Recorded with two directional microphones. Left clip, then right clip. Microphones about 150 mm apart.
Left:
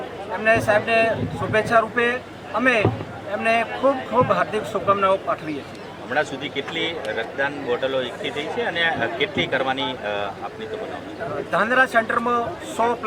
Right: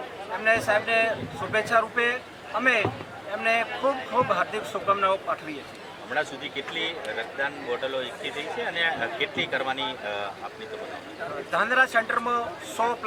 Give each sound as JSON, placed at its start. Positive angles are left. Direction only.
{"t": 0.3, "sound": "speech", "side_deg": 15}
{"t": 11.5, "sound": "speech", "side_deg": 15}